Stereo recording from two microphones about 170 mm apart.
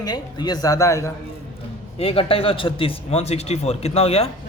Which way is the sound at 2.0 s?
35° left (ahead or behind).